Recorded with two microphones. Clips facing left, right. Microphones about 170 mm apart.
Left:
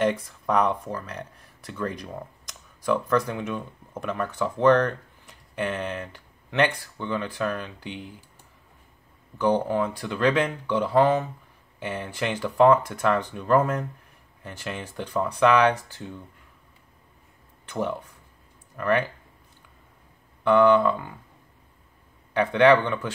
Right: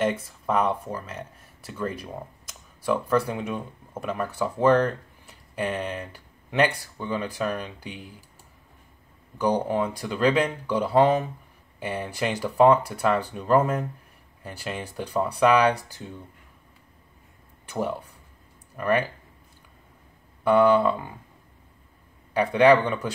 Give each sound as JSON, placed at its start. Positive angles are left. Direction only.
{"t": 0.0, "sound": "speech", "side_deg": -5}
{"t": 9.4, "sound": "speech", "side_deg": -15}
{"t": 17.6, "sound": "speech", "side_deg": -10}
{"t": 20.4, "sound": "speech", "side_deg": -10}
{"t": 22.3, "sound": "speech", "side_deg": -10}